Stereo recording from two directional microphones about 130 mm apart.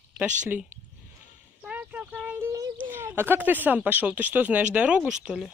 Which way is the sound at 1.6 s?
10° right (ahead or behind).